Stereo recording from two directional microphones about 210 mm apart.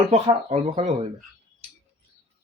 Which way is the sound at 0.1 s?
30° right (ahead or behind).